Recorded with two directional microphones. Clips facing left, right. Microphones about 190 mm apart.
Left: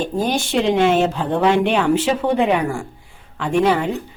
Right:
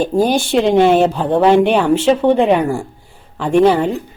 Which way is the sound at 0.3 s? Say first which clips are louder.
Right 3 dB; 35° right (ahead or behind).